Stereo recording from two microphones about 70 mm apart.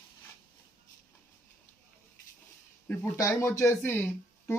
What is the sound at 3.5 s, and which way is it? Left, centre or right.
Speech, left.